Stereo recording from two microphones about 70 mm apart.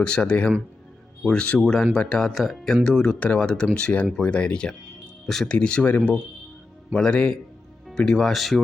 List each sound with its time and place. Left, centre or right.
0.0 s speech: centre
6.9 s speech: centre